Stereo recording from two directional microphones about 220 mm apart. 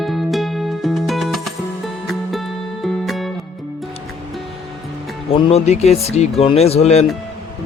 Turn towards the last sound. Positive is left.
turn(degrees=30)  # may be behind; listen again after turning